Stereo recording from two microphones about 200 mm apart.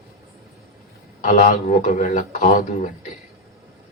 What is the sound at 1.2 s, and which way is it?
A man's voice, 40° left (ahead or behind).